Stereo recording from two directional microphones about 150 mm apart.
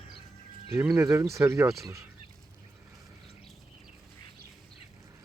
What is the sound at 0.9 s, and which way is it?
Speech, 20° right (ahead or behind).